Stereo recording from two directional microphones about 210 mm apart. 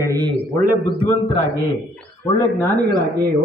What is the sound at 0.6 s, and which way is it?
Speech, 50° right (ahead or behind).